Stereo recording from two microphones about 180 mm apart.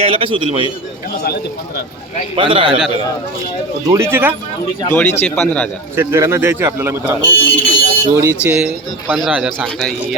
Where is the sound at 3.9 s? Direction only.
15° right (ahead or behind).